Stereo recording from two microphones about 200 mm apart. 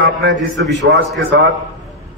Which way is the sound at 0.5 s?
60° right (ahead or behind).